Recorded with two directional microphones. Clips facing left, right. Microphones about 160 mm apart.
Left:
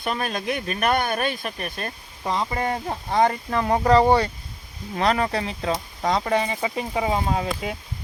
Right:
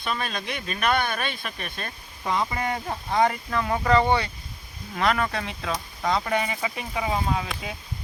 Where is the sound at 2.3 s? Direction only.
30° left (ahead or behind).